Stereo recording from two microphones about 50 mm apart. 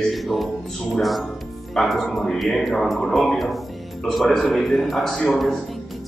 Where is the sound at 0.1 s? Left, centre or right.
Centre.